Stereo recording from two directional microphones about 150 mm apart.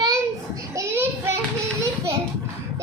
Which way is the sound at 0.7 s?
15° right (ahead or behind).